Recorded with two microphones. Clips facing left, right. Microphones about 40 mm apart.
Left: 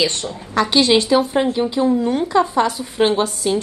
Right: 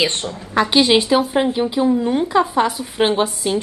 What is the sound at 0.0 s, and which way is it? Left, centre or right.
Speech, right.